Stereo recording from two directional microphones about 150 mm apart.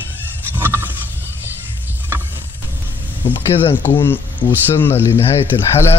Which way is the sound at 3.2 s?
35° left (ahead or behind).